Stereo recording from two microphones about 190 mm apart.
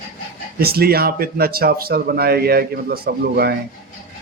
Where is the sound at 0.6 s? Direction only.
55° right (ahead or behind).